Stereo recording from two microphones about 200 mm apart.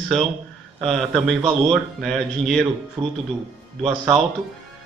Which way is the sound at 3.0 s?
25° right (ahead or behind).